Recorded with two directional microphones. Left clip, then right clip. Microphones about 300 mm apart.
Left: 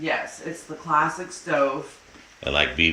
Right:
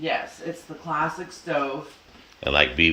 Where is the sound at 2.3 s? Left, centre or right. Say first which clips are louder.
Right 2 dB; centre.